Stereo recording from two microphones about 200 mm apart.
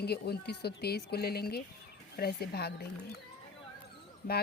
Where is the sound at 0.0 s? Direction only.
55° left (ahead or behind).